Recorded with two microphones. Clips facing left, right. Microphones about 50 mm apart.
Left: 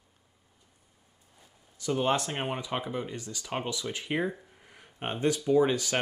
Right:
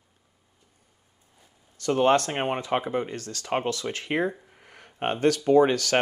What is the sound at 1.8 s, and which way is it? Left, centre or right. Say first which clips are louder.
Speech: right 7 dB; right.